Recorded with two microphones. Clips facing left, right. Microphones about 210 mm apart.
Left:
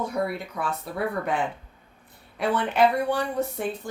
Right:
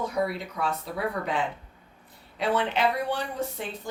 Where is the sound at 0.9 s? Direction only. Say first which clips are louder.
Left 5 dB; 55° left (ahead or behind).